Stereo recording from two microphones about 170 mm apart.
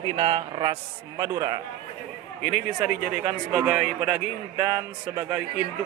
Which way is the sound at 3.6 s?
5° right (ahead or behind).